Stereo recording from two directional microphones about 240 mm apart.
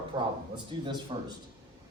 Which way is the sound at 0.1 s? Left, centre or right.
Centre.